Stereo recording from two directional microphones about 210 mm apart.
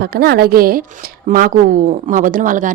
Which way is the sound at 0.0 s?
50° right (ahead or behind).